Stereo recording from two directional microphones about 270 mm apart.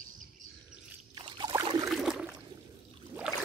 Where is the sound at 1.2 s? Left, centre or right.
Centre.